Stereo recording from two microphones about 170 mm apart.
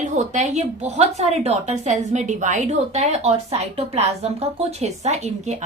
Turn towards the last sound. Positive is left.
turn(degrees=-40)  # may be behind; listen again after turning